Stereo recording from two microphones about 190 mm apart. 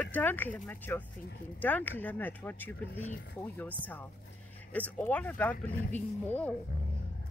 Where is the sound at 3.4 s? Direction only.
10° left (ahead or behind).